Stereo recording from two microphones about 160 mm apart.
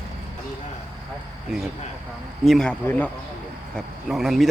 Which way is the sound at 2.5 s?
5° left (ahead or behind).